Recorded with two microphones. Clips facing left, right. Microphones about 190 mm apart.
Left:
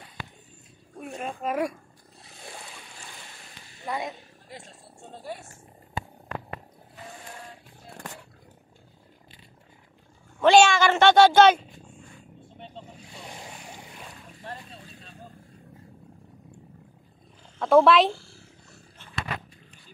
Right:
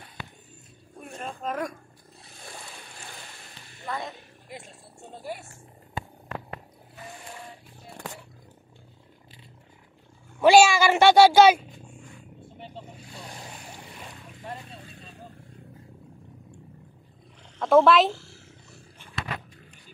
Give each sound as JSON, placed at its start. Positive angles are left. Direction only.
{"t": 1.0, "sound": "a sound", "side_deg": 5}
{"t": 3.8, "sound": "a sound", "side_deg": 15}
{"t": 4.5, "sound": "music", "side_deg": -10}
{"t": 10.4, "sound": "speech", "side_deg": -5}
{"t": 12.5, "sound": "vehicle", "side_deg": -5}
{"t": 17.6, "sound": "speech", "side_deg": 0}